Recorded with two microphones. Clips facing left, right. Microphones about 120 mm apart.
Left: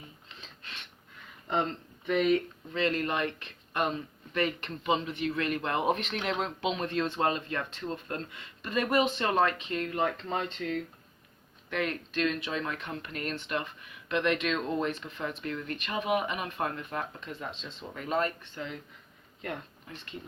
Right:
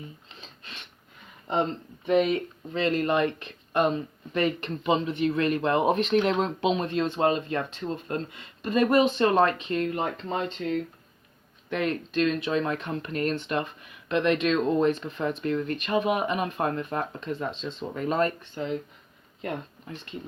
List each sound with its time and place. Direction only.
1.5 s speech: 25° right (ahead or behind)